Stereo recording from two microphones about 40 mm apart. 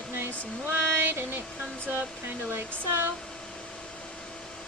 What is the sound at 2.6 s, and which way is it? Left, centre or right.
Speech, right.